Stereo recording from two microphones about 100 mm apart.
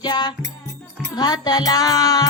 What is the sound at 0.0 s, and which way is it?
Music, 45° left (ahead or behind).